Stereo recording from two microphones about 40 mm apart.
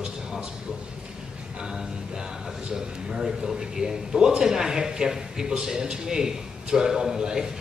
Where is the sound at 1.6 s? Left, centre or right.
Centre.